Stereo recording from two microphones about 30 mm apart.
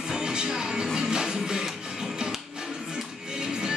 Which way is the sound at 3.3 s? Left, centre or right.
Right.